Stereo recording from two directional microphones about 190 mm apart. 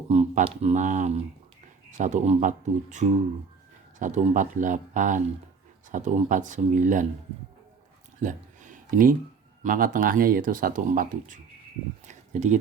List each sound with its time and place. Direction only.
0.1 s speech: 35° right (ahead or behind)
8.2 s a sound: 40° right (ahead or behind)
9.6 s speech: 45° right (ahead or behind)